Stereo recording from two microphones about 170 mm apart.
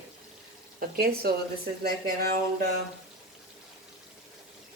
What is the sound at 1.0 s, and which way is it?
Speech, 65° right (ahead or behind).